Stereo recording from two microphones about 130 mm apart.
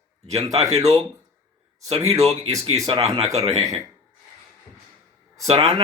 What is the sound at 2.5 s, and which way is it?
Speech, 25° right (ahead or behind).